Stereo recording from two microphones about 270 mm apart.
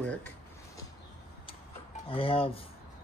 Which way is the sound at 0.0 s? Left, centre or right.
Centre.